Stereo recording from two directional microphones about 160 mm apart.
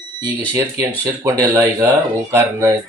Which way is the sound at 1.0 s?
20° right (ahead or behind).